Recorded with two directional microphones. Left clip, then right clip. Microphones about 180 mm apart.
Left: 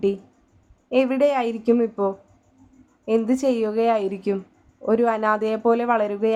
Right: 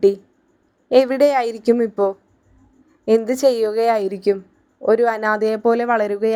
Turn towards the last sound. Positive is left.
turn(degrees=-25)  # may be behind; listen again after turning